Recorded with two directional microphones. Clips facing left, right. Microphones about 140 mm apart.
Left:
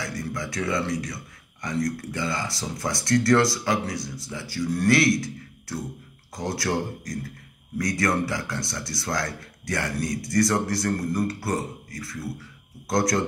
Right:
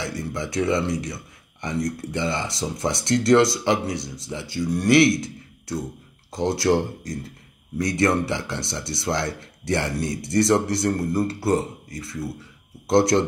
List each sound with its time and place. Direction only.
0.0 s a man's voice: 25° right (ahead or behind)